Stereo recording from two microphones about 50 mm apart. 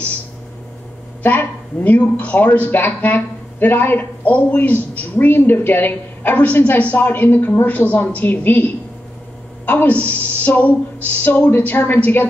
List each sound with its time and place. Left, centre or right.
1.2 s speech: left
9.8 s a woman's voice: left